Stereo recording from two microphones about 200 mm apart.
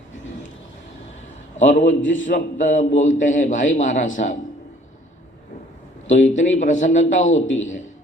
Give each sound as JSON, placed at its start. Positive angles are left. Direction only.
{"t": 1.5, "sound": "a man's voice", "side_deg": 35}
{"t": 2.0, "sound": "a man's voice", "side_deg": 70}
{"t": 2.2, "sound": "a man's voice", "side_deg": 40}
{"t": 6.3, "sound": "a man's voice", "side_deg": 40}
{"t": 7.3, "sound": "a man's voice", "side_deg": 75}